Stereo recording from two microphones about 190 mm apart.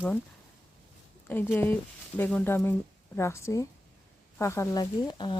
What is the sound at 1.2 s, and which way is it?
Speech, 10° left (ahead or behind).